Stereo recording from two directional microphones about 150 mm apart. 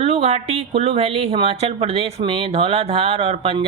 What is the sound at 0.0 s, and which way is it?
Speech, 45° right (ahead or behind).